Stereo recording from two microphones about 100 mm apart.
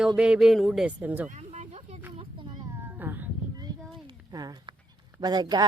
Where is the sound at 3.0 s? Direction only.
20° right (ahead or behind).